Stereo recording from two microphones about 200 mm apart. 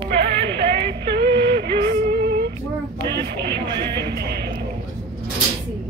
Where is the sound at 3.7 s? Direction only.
55° right (ahead or behind).